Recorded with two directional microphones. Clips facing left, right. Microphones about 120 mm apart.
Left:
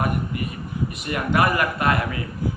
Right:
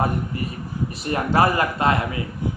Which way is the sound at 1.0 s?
30° right (ahead or behind).